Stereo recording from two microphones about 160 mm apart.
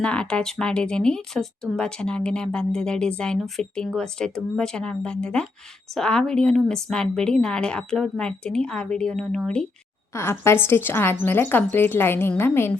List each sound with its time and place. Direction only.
0.0 s speech: 5° left (ahead or behind)
10.2 s speech: 15° left (ahead or behind)